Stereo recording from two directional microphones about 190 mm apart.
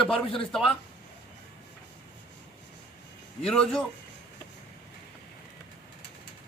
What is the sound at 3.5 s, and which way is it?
Speech, 5° left (ahead or behind).